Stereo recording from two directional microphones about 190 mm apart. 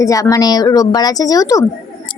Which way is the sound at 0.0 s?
15° left (ahead or behind).